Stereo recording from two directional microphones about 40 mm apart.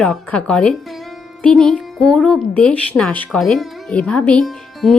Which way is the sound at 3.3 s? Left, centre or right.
Centre.